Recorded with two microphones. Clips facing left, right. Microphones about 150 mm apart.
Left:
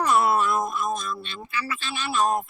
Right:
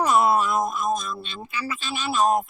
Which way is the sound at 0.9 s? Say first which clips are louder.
Right 1 dB; 15° right (ahead or behind).